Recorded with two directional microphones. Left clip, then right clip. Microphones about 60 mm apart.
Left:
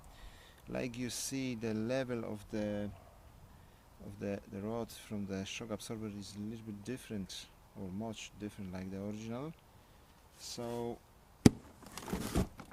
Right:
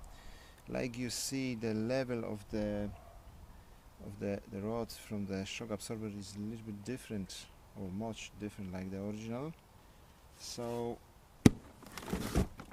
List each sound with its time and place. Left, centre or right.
0.7 s speech: right
4.2 s speech: right
7.8 s speech: centre
11.4 s chop: centre
12.0 s a sound: centre